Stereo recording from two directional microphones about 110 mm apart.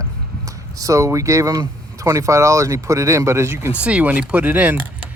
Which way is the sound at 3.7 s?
10° right (ahead or behind).